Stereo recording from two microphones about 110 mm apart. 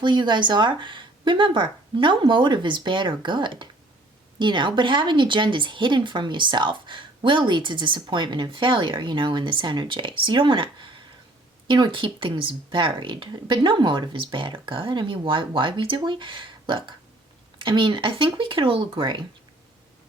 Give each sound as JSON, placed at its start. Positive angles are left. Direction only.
{"t": 0.0, "sound": "a woman's voice", "side_deg": -45}